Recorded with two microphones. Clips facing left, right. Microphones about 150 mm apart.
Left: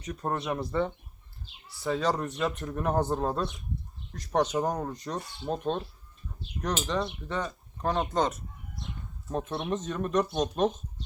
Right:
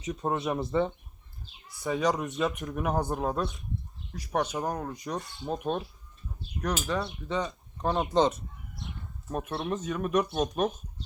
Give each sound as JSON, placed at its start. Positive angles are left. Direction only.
{"t": 0.0, "sound": "speech", "side_deg": 0}
{"t": 0.7, "sound": "speech", "side_deg": -20}
{"t": 7.1, "sound": "speech", "side_deg": -15}
{"t": 7.4, "sound": "speech", "side_deg": 0}